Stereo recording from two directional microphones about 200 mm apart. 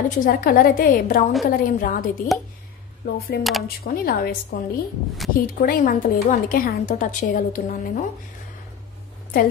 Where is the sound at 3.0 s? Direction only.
55° left (ahead or behind).